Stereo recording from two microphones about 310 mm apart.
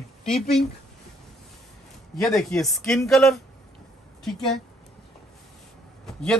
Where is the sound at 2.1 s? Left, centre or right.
Centre.